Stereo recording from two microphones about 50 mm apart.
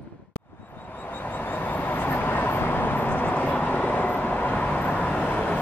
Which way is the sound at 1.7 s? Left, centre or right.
Left.